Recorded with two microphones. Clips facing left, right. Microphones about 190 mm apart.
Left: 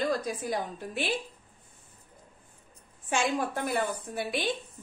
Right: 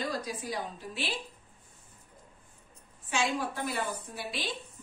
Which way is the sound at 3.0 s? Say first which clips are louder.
Left 3 dB; 55° left (ahead or behind).